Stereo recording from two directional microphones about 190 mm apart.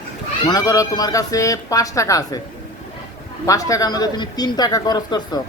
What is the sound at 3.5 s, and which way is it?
Speech, 15° left (ahead or behind).